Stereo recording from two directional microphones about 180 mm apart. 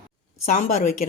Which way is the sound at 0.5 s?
45° left (ahead or behind).